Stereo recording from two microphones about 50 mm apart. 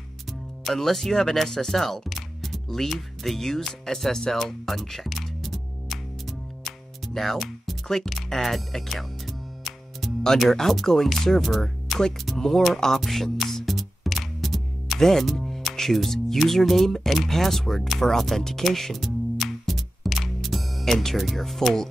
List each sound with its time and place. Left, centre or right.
0.7 s speech: centre
7.2 s music: centre
8.1 s speech: centre